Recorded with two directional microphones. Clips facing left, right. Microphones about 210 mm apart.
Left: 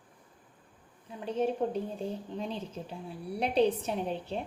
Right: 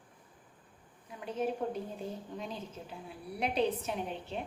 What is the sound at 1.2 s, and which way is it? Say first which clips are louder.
A woman's voice: left 4 dB; 30° left (ahead or behind).